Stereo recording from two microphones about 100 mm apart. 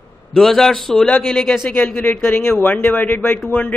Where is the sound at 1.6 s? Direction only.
20° left (ahead or behind).